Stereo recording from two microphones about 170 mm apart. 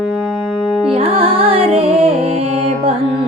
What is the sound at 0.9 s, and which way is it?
Music, 35° right (ahead or behind).